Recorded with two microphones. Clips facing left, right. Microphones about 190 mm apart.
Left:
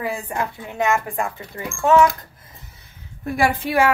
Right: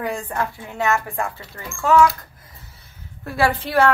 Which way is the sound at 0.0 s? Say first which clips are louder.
Even; 5° left (ahead or behind).